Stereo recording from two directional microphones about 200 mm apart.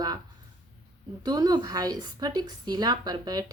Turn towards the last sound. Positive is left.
turn(degrees=-20)  # may be behind; listen again after turning